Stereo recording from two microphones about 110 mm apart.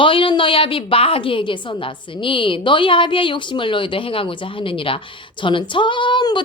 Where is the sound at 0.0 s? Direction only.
50° left (ahead or behind).